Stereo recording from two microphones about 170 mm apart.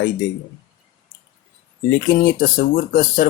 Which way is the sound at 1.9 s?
55° left (ahead or behind).